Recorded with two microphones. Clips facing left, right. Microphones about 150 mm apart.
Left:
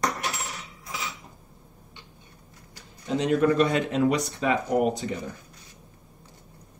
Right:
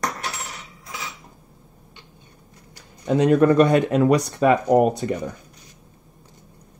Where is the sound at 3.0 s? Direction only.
55° right (ahead or behind).